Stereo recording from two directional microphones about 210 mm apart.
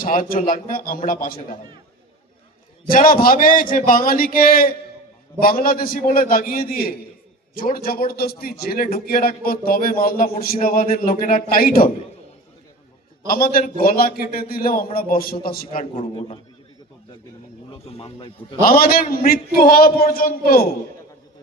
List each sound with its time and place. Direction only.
0.0 s a man's voice: 40° left (ahead or behind)
2.9 s a man's voice: 45° left (ahead or behind)
13.2 s a man's voice: 45° left (ahead or behind)
17.7 s speech: 30° left (ahead or behind)
18.6 s a man's voice: 45° left (ahead or behind)